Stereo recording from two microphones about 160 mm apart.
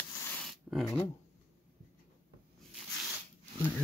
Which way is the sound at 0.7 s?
Centre (ahead or behind).